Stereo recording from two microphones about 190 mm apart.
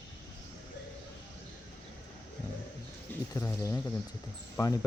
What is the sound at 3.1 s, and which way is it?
Speech, 10° left (ahead or behind).